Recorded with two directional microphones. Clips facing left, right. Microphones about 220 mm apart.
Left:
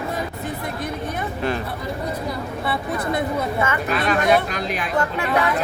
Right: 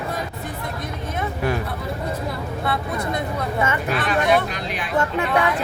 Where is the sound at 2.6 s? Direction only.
5° left (ahead or behind).